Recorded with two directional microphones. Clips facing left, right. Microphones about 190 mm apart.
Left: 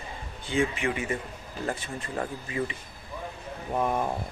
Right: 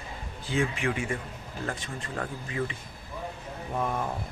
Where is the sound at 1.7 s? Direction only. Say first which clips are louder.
Left 4 dB; 20° left (ahead or behind).